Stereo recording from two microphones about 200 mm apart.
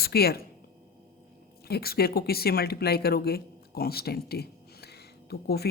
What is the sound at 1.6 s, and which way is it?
A woman's voice, 50° left (ahead or behind).